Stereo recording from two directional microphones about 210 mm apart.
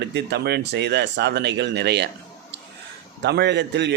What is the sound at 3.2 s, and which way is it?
Speech, 55° right (ahead or behind).